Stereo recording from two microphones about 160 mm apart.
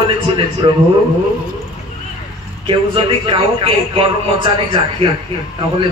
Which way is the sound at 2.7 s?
35° right (ahead or behind).